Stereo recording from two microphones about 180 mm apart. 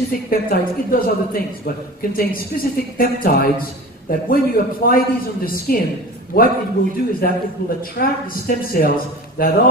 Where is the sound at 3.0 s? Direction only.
55° left (ahead or behind).